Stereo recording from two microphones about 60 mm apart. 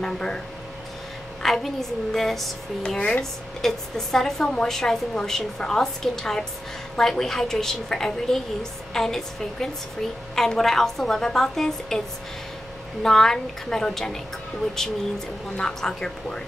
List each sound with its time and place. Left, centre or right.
0.0 s a woman's voice: centre
1.4 s a woman's voice: centre
3.0 s a woman's voice: centre
13.0 s a woman's voice: centre
15.5 s a woman's voice: centre